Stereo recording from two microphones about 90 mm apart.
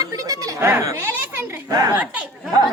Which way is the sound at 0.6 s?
30° right (ahead or behind).